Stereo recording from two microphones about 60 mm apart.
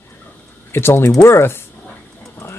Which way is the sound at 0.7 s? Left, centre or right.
Left.